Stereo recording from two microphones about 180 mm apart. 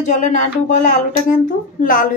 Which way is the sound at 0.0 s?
40° left (ahead or behind).